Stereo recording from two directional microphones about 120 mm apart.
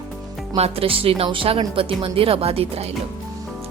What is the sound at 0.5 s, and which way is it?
A woman's voice, 55° right (ahead or behind).